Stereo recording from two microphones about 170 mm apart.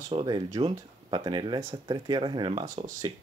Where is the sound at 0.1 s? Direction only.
30° right (ahead or behind).